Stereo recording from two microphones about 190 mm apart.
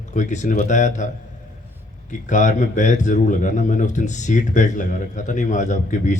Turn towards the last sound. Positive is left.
turn(degrees=40)  # may be behind; listen again after turning